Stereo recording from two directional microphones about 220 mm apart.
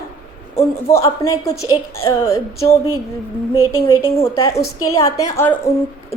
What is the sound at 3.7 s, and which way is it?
A woman's voice, 10° left (ahead or behind).